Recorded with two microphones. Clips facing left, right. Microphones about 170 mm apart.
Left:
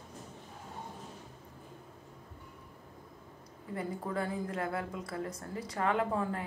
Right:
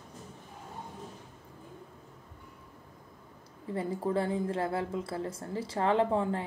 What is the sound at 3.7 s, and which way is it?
A woman's voice, 30° right (ahead or behind).